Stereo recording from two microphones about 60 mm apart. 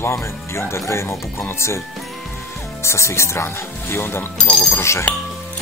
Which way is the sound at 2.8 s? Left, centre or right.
Left.